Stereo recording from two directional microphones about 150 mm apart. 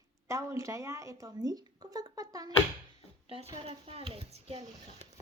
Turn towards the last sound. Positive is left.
turn(degrees=-45)  # may be behind; listen again after turning